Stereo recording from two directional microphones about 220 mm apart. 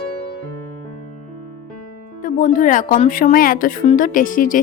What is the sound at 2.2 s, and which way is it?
Speech, 35° left (ahead or behind).